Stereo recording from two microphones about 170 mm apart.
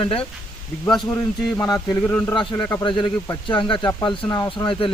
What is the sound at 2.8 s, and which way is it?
A man's voice, 30° left (ahead or behind).